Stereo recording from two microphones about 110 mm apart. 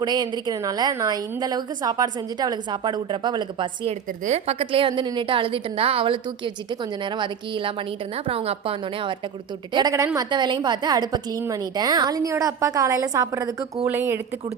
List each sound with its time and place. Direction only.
0.0 s a woman's voice: 40° right (ahead or behind)
3.8 s a woman's voice: 70° right (ahead or behind); by 7.7 s 50° right (ahead or behind)
8.3 s a woman's voice: 60° right (ahead or behind)
9.8 s a woman's voice: 40° right (ahead or behind); by 14.2 s 20° right (ahead or behind)